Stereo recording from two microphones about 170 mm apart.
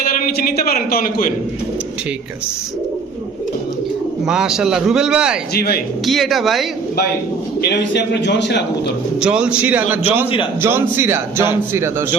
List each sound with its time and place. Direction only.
0.3 s a man's voice: 60° left (ahead or behind)
4.3 s a man's voice: 5° right (ahead or behind)
5.5 s a man's voice: 65° left (ahead or behind)
6.1 s a man's voice: centre (ahead or behind)
7.6 s a man's voice: 85° left
9.2 s a man's voice: 5° right (ahead or behind)